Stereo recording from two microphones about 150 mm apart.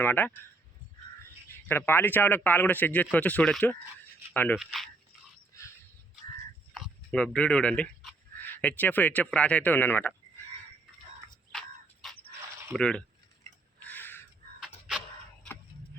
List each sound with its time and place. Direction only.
0.0 s speech: 10° left (ahead or behind)
1.6 s speech: 15° left (ahead or behind)
5.5 s a sound: 20° left (ahead or behind)
6.7 s speech: centre (ahead or behind)
12.7 s speech: 5° left (ahead or behind)
13.8 s crow: 10° left (ahead or behind)